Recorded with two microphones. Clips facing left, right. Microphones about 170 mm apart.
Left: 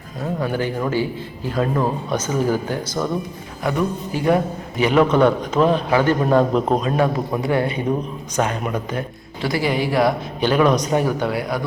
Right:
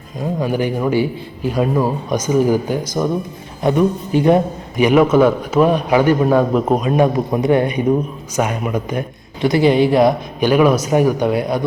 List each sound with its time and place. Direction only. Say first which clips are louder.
0.2 s a man's voice: right 4 dB; 15° right (ahead or behind)